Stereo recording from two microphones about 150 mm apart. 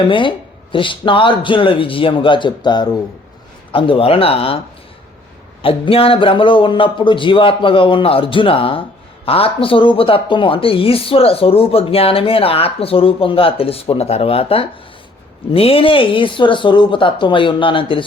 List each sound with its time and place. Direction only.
0.1 s speech: 35° left (ahead or behind)
5.6 s speech: 35° left (ahead or behind)